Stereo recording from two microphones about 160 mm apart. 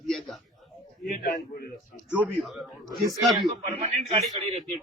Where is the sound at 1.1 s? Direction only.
65° left (ahead or behind).